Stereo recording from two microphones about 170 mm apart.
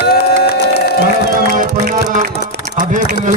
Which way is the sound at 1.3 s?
55° right (ahead or behind).